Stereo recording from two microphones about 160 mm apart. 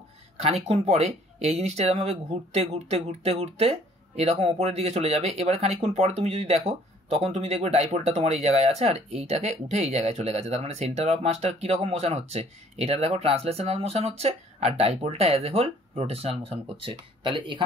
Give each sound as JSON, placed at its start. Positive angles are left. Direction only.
{"t": 0.4, "sound": "speech", "side_deg": -40}